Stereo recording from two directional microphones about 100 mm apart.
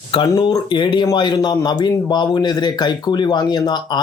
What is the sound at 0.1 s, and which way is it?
Speech, 50° left (ahead or behind).